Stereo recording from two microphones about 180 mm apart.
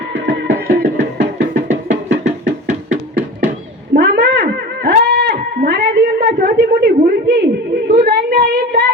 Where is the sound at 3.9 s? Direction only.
65° right (ahead or behind).